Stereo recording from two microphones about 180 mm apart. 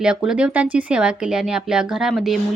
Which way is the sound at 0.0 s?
5° right (ahead or behind).